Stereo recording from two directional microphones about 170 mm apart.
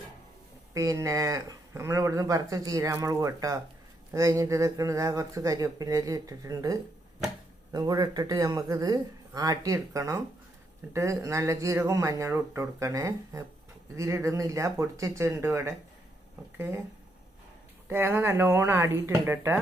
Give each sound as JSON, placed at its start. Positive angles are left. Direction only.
{"t": 0.7, "sound": "speech", "side_deg": -20}
{"t": 17.8, "sound": "speech", "side_deg": -15}